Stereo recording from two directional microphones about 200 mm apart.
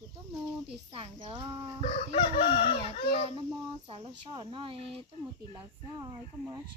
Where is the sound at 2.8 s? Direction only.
25° right (ahead or behind).